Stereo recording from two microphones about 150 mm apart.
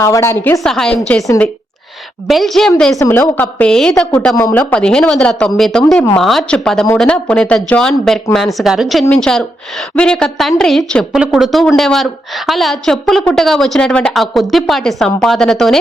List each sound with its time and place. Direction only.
0.0 s a woman's voice: 20° left (ahead or behind)
0.6 s a woman's voice: 5° left (ahead or behind)
2.2 s a woman's voice: centre (ahead or behind)
3.0 s a woman's voice: 15° left (ahead or behind)